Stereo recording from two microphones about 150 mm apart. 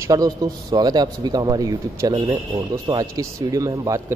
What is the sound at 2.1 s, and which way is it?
Speech, 45° right (ahead or behind).